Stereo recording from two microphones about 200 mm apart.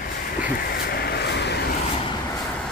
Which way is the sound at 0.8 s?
50° left (ahead or behind).